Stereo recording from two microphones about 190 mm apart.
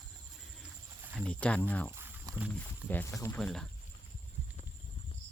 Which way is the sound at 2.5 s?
10° left (ahead or behind).